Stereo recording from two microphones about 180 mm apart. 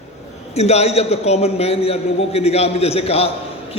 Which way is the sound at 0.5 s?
35° left (ahead or behind).